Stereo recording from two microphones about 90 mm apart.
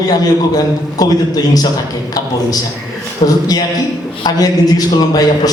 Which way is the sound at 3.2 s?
90° left.